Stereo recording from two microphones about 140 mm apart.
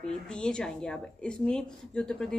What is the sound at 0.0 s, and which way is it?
Speech, 5° left (ahead or behind).